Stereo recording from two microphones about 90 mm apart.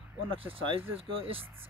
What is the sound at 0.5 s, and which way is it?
Speech, 80° right.